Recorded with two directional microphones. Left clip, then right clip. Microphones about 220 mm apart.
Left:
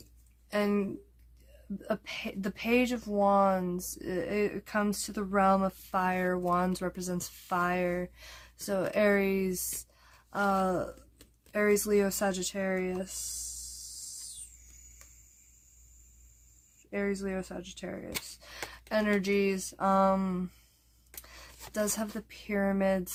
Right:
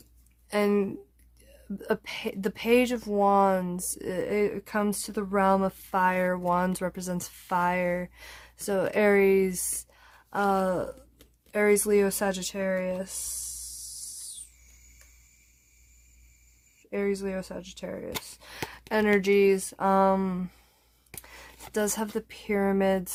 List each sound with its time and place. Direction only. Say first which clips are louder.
0.5 s speech: right 5 dB; 40° right (ahead or behind)
9.7 s a sound: right 3 dB; 35° right (ahead or behind)
11.5 s speech: right 4 dB; 35° right (ahead or behind)
16.9 s speech: right 4 dB; 35° right (ahead or behind)
21.2 s a sound: right 3 dB; 35° right (ahead or behind)
21.7 s speech: right 4 dB; 35° right (ahead or behind)